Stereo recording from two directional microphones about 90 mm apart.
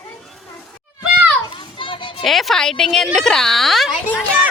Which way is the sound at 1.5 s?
65° left (ahead or behind).